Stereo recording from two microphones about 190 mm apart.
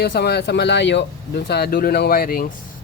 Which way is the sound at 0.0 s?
60° left (ahead or behind).